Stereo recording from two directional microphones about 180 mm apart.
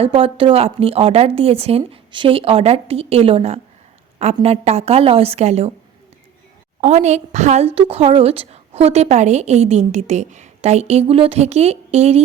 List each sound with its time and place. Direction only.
0.0 s a woman's voice: 30° right (ahead or behind)
6.8 s a woman's voice: 40° right (ahead or behind)